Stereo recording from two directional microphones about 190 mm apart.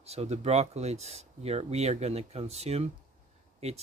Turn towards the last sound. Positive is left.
turn(degrees=-35)  # may be behind; listen again after turning